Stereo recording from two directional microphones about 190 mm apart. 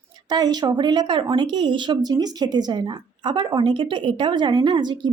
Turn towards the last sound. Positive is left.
turn(degrees=-25)  # may be behind; listen again after turning